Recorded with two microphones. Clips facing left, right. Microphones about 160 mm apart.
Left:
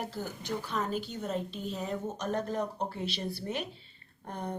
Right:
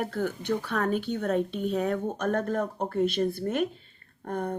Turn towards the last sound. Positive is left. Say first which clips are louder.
# right 7 dB
turn(degrees=-50)  # may be behind; listen again after turning